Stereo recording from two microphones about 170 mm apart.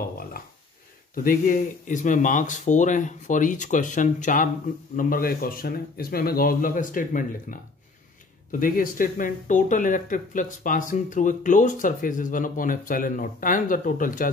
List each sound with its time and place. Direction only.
0.3 s speech: 55° left (ahead or behind)